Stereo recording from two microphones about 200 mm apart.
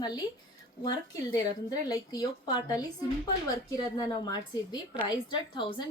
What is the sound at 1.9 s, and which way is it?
A woman's voice, 20° left (ahead or behind).